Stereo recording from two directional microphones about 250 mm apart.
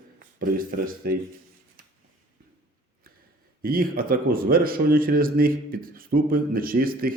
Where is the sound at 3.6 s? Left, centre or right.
Right.